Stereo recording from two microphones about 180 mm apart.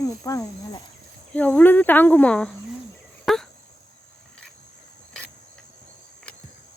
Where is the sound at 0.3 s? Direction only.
20° left (ahead or behind).